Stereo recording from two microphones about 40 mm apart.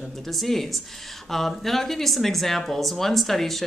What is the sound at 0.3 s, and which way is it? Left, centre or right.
Speech, centre.